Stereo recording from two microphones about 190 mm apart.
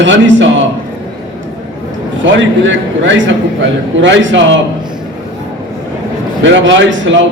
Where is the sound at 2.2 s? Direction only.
75° right (ahead or behind).